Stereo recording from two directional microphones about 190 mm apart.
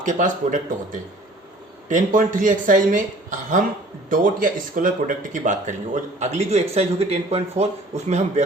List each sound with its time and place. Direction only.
0.0 s a woman's voice: 40° right (ahead or behind)